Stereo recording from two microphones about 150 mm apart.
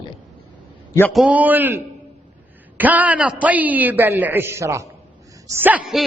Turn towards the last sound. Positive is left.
turn(degrees=-5)  # may be behind; listen again after turning